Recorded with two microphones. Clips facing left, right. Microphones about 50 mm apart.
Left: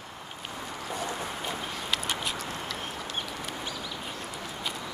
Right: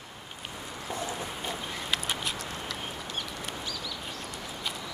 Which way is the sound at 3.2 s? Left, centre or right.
Left.